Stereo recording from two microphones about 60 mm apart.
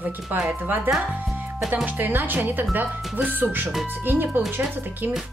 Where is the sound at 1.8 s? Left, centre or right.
Right.